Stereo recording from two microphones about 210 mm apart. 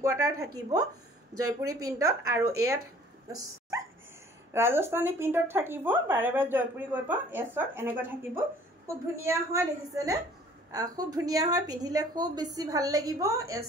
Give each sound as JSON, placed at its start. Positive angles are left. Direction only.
{"t": 0.0, "sound": "speech", "side_deg": -15}
{"t": 4.5, "sound": "speech", "side_deg": -10}